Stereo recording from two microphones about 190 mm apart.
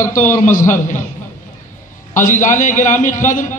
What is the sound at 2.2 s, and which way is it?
A man's voice, 40° left (ahead or behind).